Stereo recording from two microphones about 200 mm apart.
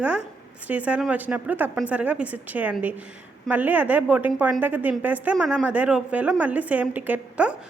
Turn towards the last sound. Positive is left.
turn(degrees=-5)  # may be behind; listen again after turning